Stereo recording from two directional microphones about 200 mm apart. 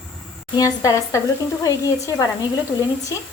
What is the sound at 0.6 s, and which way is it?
A woman's voice, 15° left (ahead or behind).